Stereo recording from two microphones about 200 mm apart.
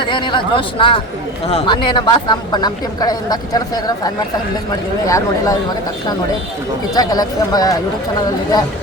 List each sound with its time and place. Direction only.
0.0 s a woman's voice: 25° left (ahead or behind)
6.9 s a woman's voice: 20° left (ahead or behind)